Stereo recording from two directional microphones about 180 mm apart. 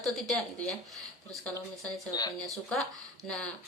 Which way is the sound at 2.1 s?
20° left (ahead or behind).